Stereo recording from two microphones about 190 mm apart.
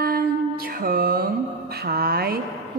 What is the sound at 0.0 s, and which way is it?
Music, 50° right (ahead or behind).